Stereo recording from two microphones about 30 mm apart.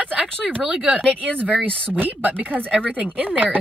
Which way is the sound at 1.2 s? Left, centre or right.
Right.